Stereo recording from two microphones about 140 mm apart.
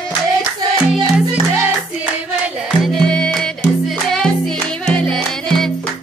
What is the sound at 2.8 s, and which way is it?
Music, 5° left (ahead or behind).